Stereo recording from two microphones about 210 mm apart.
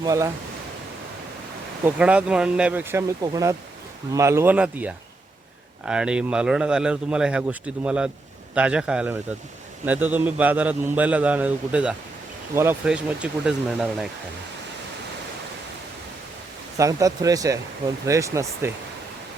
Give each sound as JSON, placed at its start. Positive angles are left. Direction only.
{"t": 0.0, "sound": "a man's voice", "side_deg": -15}
{"t": 1.8, "sound": "a man's voice", "side_deg": -5}
{"t": 16.7, "sound": "a man's voice", "side_deg": -15}